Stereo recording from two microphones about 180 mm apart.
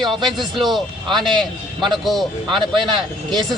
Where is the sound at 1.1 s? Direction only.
Centre (ahead or behind).